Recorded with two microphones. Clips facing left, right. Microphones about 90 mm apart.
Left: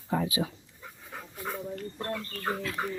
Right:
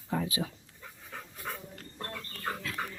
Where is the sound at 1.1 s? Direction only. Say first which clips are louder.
Left 3 dB; 20° left (ahead or behind).